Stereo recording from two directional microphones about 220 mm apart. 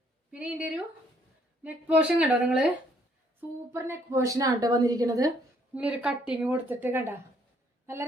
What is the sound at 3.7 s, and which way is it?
A woman's voice, 15° right (ahead or behind).